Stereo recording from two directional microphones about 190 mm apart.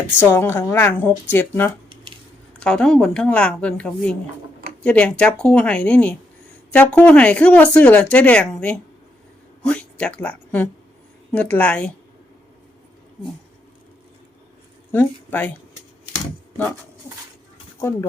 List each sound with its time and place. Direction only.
0.2 s a woman's voice: 10° left (ahead or behind)
9.6 s a woman's voice: 5° left (ahead or behind)
14.9 s speech: 10° left (ahead or behind)
17.7 s speech: 15° left (ahead or behind)